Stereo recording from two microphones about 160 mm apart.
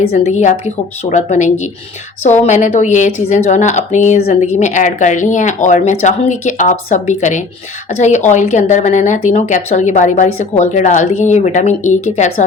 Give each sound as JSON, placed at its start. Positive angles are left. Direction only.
{"t": 0.3, "sound": "a woman's voice", "side_deg": 45}